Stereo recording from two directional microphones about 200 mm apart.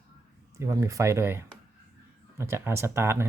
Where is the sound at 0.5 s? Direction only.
15° right (ahead or behind).